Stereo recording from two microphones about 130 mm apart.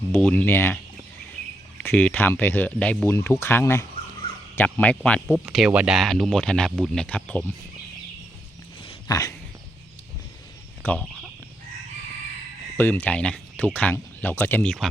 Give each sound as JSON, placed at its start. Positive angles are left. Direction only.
{"t": 0.1, "sound": "speech", "side_deg": 10}
{"t": 1.8, "sound": "speech", "side_deg": 10}
{"t": 5.3, "sound": "speech", "side_deg": -5}
{"t": 9.0, "sound": "a sound", "side_deg": 25}
{"t": 11.0, "sound": "fowl", "side_deg": 0}
{"t": 12.7, "sound": "speech", "side_deg": 15}